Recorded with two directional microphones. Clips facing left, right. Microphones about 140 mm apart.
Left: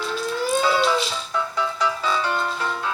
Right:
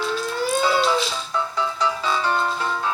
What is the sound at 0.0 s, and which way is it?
Siren, centre (ahead or behind).